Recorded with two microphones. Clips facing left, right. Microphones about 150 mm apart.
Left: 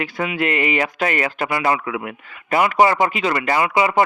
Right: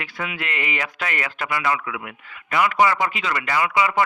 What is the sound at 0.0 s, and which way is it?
Speech, 40° left (ahead or behind).